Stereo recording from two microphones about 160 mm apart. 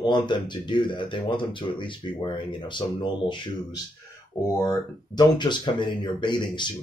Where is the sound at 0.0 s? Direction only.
30° left (ahead or behind).